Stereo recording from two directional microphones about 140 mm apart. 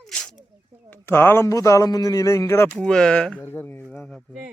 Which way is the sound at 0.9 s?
15° left (ahead or behind).